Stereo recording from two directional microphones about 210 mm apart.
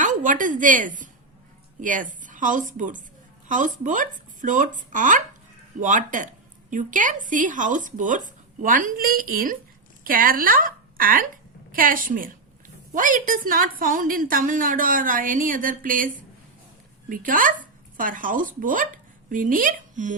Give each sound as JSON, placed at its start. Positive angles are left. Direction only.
{"t": 0.0, "sound": "a woman's voice", "side_deg": -40}